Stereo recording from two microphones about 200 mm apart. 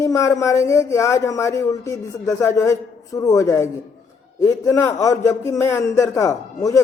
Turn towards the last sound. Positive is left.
turn(degrees=15)  # may be behind; listen again after turning